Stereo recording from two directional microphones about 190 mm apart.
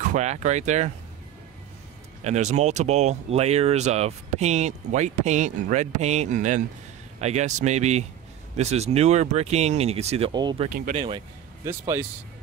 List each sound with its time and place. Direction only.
0.0 s speech: 40° right (ahead or behind)
2.2 s speech: 35° right (ahead or behind); by 12.1 s 15° right (ahead or behind)